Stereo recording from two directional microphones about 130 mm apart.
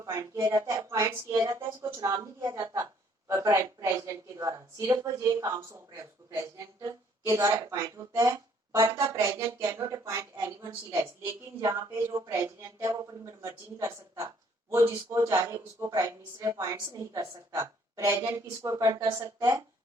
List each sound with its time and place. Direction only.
0.0 s speech: 25° right (ahead or behind)